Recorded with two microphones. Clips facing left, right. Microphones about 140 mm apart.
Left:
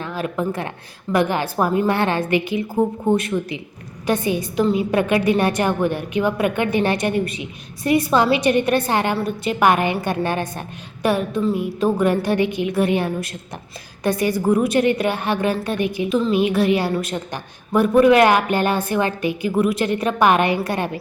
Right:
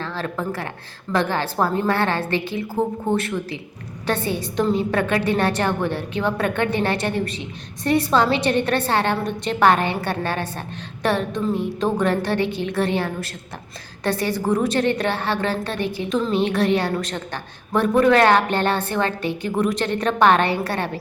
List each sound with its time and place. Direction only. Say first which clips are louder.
0.0 s a woman's voice: left 3 dB; 15° left (ahead or behind)